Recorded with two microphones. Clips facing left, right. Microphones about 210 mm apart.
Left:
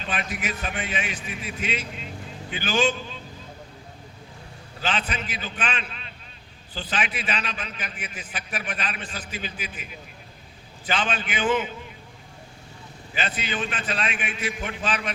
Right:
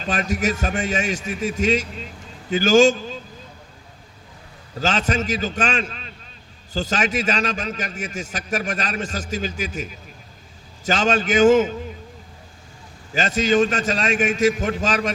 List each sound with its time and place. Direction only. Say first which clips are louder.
0.0 s a man's voice: right 8 dB; 40° right (ahead or behind)
4.8 s a man's voice: right 7 dB; 40° right (ahead or behind)
13.1 s a man's voice: right 12 dB; 40° right (ahead or behind)